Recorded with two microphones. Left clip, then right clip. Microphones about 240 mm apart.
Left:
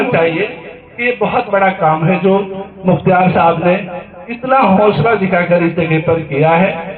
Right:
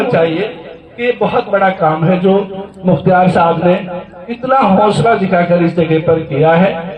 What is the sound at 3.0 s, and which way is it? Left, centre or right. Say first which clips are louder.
Speech: right 1 dB; right.